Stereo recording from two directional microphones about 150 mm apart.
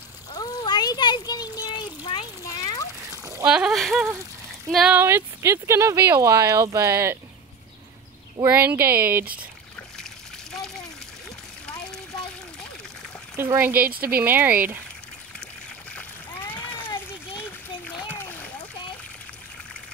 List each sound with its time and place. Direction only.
0.3 s a sound: 25° left (ahead or behind)
3.4 s speech: 5° right (ahead or behind)
4.9 s speech: 15° right (ahead or behind)
8.4 s speech: 15° right (ahead or behind)
9.8 s splash: 5° left (ahead or behind)
13.4 s speech: 15° right (ahead or behind)
13.8 s speech: 75° right (ahead or behind)
14.2 s speech: 15° right (ahead or behind)
15.9 s splash: 10° left (ahead or behind)